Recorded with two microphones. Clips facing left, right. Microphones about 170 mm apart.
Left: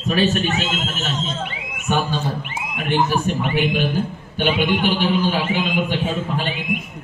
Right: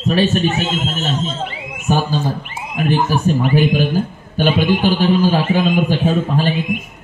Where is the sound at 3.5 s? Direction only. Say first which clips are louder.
Right 5 dB; 40° right (ahead or behind).